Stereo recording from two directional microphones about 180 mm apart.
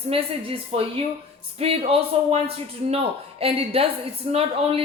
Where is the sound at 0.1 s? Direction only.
30° right (ahead or behind).